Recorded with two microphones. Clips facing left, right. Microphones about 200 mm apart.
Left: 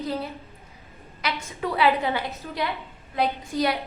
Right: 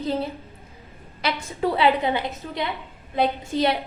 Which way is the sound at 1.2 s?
30° right (ahead or behind).